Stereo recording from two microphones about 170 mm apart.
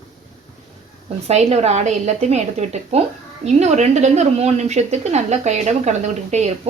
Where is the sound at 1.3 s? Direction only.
40° right (ahead or behind).